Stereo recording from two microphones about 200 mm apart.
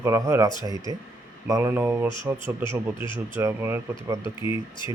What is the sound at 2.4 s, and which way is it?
Speech, 25° left (ahead or behind).